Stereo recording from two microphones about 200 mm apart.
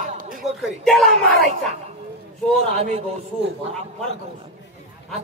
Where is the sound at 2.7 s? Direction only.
35° right (ahead or behind).